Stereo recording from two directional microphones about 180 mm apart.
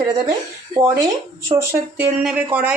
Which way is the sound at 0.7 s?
20° right (ahead or behind).